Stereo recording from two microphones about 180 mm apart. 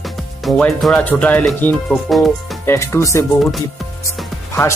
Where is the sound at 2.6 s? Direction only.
15° left (ahead or behind).